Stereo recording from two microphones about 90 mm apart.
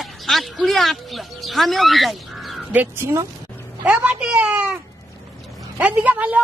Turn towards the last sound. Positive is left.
turn(degrees=-15)  # may be behind; listen again after turning